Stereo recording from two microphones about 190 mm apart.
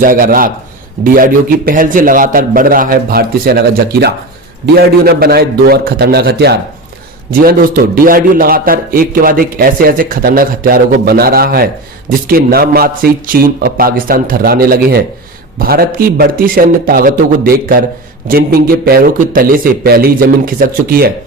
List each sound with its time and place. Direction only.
0.0 s a man's voice: 50° right (ahead or behind)